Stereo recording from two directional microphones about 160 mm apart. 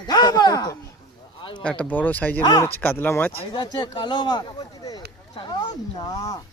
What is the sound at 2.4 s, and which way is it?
Speech, 25° left (ahead or behind).